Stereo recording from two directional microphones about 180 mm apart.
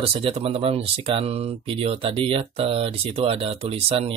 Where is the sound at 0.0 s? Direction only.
30° right (ahead or behind).